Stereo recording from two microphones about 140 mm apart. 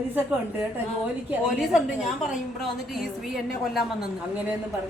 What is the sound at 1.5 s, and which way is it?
A woman's voice, centre (ahead or behind).